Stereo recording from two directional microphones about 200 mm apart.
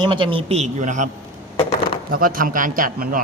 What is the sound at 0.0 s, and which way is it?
A man's voice, 25° right (ahead or behind).